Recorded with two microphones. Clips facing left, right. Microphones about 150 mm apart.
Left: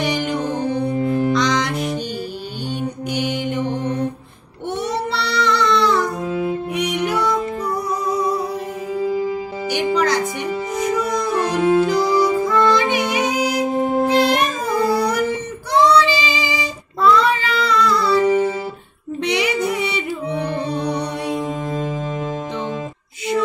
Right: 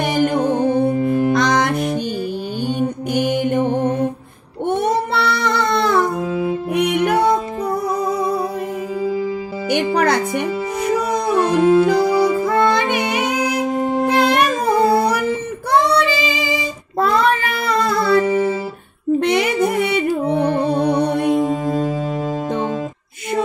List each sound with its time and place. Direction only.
0.0 s music: 50° right (ahead or behind)
3.1 s mantra: 50° right (ahead or behind)
4.6 s music: 55° right (ahead or behind)
9.7 s music: 55° right (ahead or behind)
15.7 s child singing: 60° right (ahead or behind)
19.1 s music: 50° right (ahead or behind)